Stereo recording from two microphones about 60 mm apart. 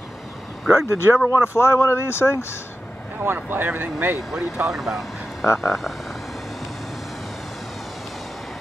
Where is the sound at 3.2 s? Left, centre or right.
Right.